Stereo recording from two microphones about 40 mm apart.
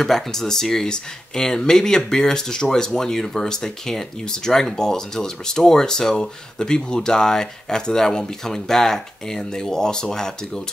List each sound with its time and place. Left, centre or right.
0.0 s speech: centre